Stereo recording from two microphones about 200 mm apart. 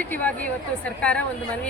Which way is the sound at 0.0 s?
5° left (ahead or behind).